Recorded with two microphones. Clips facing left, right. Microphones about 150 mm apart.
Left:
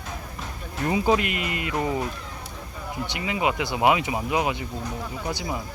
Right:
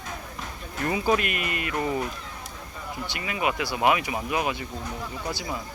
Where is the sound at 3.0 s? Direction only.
20° left (ahead or behind).